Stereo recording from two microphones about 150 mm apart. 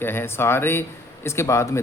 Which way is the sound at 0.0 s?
15° left (ahead or behind).